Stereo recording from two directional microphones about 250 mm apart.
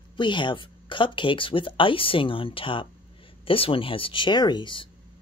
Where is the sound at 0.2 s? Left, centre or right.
Centre.